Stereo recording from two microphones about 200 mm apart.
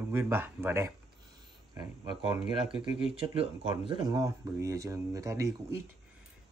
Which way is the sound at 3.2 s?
25° right (ahead or behind).